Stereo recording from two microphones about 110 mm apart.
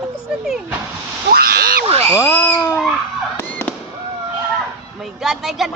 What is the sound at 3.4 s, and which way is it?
Fireworks, 15° left (ahead or behind).